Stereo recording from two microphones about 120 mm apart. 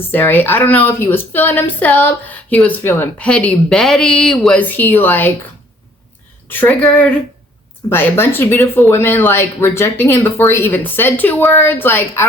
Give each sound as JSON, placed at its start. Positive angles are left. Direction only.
{"t": 0.1, "sound": "a woman's voice", "side_deg": 15}
{"t": 6.5, "sound": "a woman's voice", "side_deg": 15}